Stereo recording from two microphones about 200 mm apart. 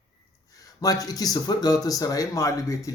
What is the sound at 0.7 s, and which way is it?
Speech, 20° left (ahead or behind).